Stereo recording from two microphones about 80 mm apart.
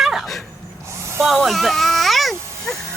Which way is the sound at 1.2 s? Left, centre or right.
Centre.